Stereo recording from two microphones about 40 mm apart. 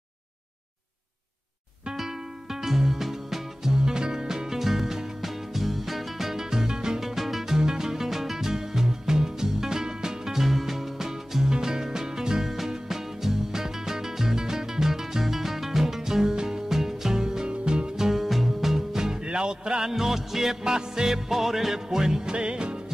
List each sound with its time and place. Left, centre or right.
2.0 s music: centre
19.2 s music: right